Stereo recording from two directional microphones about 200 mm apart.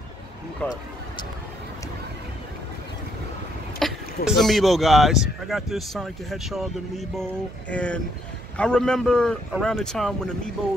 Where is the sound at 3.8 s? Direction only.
Centre (ahead or behind).